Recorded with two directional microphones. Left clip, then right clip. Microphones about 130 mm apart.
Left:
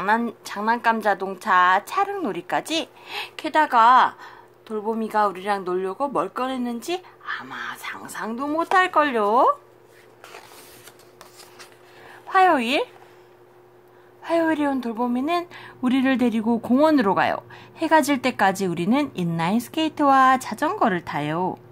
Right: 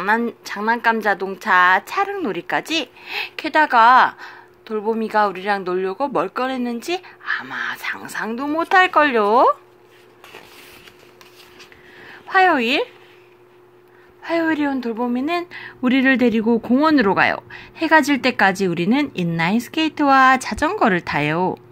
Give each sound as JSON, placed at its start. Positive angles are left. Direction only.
{"t": 0.2, "sound": "a woman's voice", "side_deg": 5}
{"t": 0.5, "sound": "a woman's voice", "side_deg": -5}
{"t": 8.3, "sound": "speech", "side_deg": -10}
{"t": 12.0, "sound": "speech", "side_deg": -5}
{"t": 14.2, "sound": "a woman's voice", "side_deg": 0}